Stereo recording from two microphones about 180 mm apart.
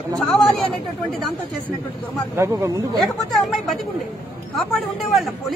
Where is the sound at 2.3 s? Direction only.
15° right (ahead or behind).